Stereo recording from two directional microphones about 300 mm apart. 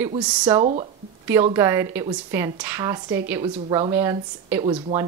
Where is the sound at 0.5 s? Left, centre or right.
Centre.